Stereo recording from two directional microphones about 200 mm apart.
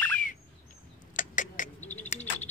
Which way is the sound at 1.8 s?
10° left (ahead or behind).